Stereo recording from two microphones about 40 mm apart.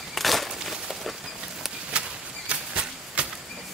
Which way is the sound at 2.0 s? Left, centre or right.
Right.